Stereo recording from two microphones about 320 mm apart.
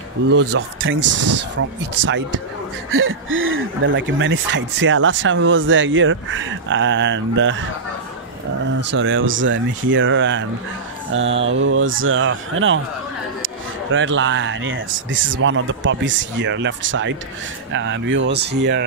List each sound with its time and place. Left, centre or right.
0.3 s speech: right
8.6 s speech: right